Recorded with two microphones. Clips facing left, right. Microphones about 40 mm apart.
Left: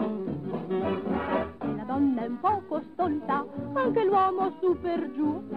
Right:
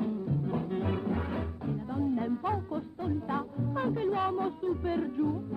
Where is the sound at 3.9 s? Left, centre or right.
Left.